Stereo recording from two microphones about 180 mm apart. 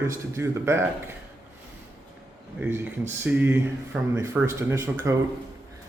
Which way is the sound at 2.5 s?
10° right (ahead or behind).